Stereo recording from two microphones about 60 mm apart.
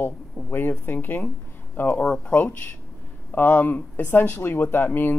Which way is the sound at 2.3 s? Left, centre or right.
Left.